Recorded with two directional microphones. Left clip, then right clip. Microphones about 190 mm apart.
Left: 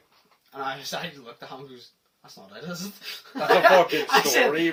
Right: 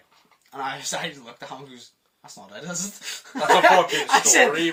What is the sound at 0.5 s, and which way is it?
Speech, 25° right (ahead or behind).